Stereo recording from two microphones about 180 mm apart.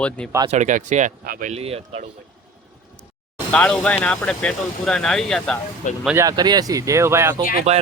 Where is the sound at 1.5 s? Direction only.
35° right (ahead or behind).